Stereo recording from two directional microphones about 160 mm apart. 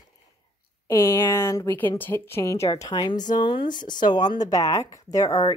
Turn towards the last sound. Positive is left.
turn(degrees=20)  # may be behind; listen again after turning